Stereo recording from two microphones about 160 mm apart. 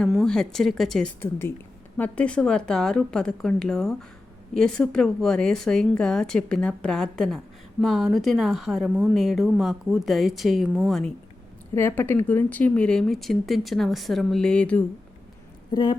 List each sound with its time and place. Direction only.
0.0 s a woman's voice: centre (ahead or behind)
1.2 s a woman's voice: 15° left (ahead or behind)
11.7 s a woman's voice: 15° left (ahead or behind)
15.7 s a woman's voice: 30° left (ahead or behind)